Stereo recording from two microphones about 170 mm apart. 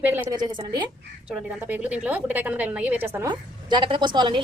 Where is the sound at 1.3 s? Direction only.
5° right (ahead or behind).